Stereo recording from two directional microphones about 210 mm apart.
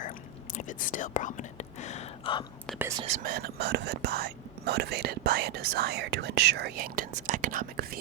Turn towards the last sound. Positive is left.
turn(degrees=-45)  # may be behind; listen again after turning